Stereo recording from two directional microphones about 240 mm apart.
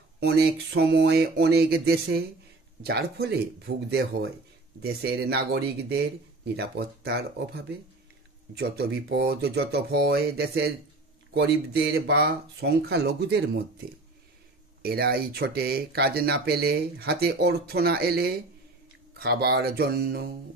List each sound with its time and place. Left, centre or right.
0.2 s speech: right